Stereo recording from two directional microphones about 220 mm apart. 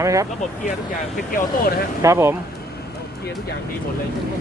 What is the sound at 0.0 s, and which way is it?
Speech, 15° right (ahead or behind).